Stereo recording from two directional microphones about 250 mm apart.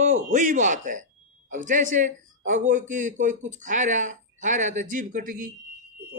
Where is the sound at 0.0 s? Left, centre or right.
Right.